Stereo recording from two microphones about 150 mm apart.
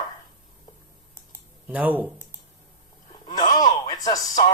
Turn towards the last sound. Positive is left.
turn(degrees=25)  # may be behind; listen again after turning